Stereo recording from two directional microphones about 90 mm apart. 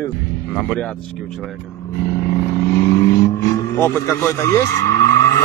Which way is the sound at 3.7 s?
25° left (ahead or behind).